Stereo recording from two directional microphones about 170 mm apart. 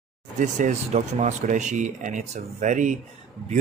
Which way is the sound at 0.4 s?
45° right (ahead or behind).